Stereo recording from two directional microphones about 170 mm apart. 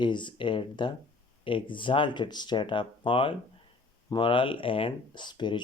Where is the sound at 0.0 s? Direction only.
25° left (ahead or behind).